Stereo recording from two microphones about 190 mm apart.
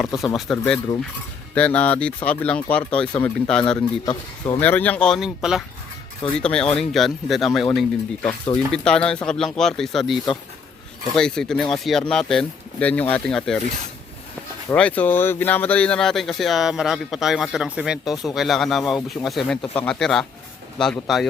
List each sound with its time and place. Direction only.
0.0 s speech: centre (ahead or behind)
4.0 s speech: 20° left (ahead or behind)
4.6 s speech: 10° left (ahead or behind)
14.7 s speech: 10° left (ahead or behind)